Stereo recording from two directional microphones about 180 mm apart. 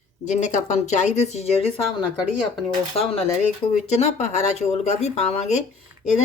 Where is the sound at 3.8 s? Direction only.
35° left (ahead or behind).